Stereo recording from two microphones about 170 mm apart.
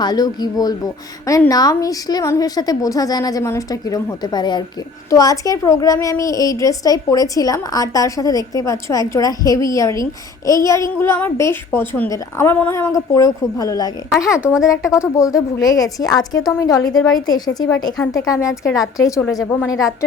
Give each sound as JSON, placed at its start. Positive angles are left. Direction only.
{"t": 0.0, "sound": "a woman's voice", "side_deg": 25}
{"t": 14.4, "sound": "speech", "side_deg": -5}
{"t": 15.0, "sound": "a woman's voice", "side_deg": 20}